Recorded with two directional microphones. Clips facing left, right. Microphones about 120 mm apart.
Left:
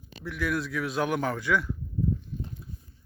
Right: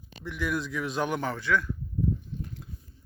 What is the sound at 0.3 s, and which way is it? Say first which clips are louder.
A man's voice: left 1 dB; centre (ahead or behind).